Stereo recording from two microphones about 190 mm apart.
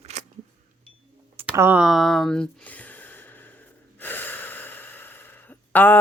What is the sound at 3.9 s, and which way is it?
Snort, 10° left (ahead or behind).